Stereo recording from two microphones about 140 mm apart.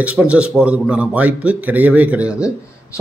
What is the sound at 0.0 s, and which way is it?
A man's voice, 10° right (ahead or behind).